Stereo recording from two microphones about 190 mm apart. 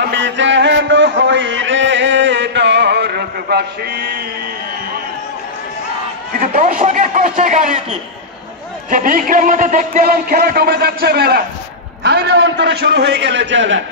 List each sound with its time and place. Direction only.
0.0 s a sound: 65° right (ahead or behind)
6.3 s a man's voice: 50° right (ahead or behind)
8.9 s a man's voice: 45° right (ahead or behind); by 13.8 s 75° right (ahead or behind)